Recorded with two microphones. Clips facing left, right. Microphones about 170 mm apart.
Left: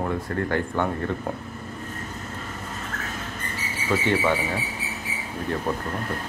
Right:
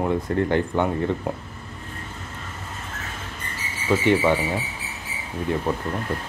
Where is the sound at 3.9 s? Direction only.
15° right (ahead or behind).